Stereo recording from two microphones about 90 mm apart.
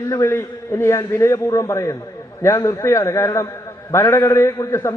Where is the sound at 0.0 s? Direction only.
35° left (ahead or behind).